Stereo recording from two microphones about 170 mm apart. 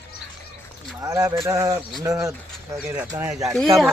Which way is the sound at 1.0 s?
20° right (ahead or behind).